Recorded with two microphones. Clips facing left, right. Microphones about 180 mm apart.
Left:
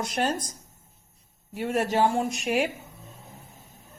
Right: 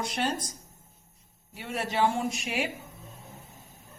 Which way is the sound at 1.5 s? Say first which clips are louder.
Left 7 dB; 50° left (ahead or behind).